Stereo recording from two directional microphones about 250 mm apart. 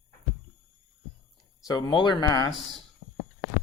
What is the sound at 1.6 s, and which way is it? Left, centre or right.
Speech, centre.